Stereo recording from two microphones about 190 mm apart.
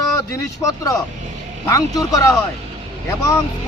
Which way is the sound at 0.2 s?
15° left (ahead or behind).